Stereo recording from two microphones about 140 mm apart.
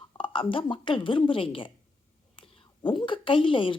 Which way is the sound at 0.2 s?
40° left (ahead or behind).